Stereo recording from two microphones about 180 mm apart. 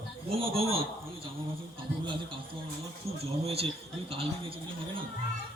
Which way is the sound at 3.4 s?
35° right (ahead or behind).